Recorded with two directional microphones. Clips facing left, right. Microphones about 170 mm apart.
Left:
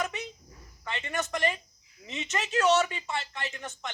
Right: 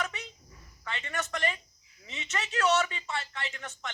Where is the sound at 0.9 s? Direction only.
20° left (ahead or behind).